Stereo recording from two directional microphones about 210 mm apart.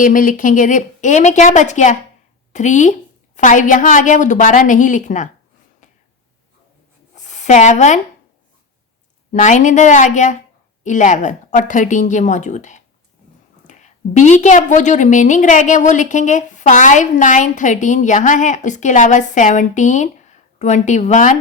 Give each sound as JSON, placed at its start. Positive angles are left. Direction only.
{"t": 0.0, "sound": "a woman's voice", "side_deg": 40}
{"t": 7.3, "sound": "speech", "side_deg": 35}
{"t": 9.3, "sound": "a woman's voice", "side_deg": 35}